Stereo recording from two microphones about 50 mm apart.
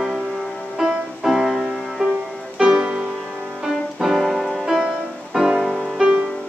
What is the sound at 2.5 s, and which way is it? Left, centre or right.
Music, centre.